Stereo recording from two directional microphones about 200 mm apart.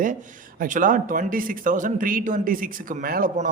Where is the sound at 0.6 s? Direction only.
40° right (ahead or behind).